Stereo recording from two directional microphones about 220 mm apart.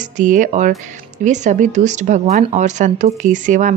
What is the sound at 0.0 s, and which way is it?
Speech, 35° right (ahead or behind).